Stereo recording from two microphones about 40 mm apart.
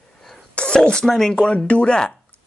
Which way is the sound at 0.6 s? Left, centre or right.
Left.